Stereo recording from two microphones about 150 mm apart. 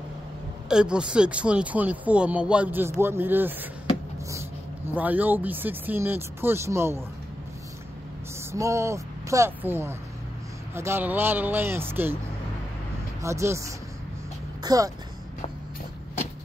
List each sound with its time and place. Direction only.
0.7 s speech: 5° right (ahead or behind)
8.5 s speech: 20° right (ahead or behind)
13.2 s speech: 20° right (ahead or behind)